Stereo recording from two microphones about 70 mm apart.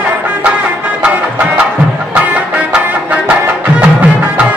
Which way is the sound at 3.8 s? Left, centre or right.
Centre.